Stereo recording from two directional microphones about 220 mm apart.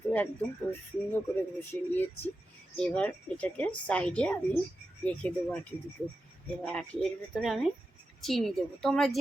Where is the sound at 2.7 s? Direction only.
5° left (ahead or behind).